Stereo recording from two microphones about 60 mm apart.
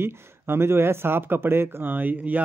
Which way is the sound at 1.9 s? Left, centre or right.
Right.